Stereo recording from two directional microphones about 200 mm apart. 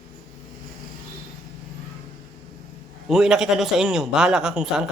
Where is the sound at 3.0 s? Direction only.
Centre (ahead or behind).